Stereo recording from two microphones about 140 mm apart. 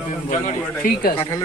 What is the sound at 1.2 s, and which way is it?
Speech, 25° left (ahead or behind).